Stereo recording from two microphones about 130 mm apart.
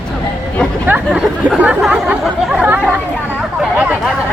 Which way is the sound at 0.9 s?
10° right (ahead or behind).